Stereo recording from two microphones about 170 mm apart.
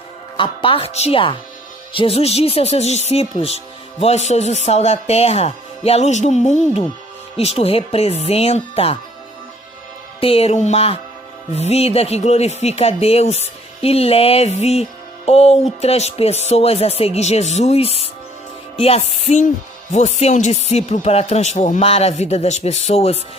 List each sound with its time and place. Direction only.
0.3 s speech: 30° left (ahead or behind)
10.2 s speech: 35° left (ahead or behind)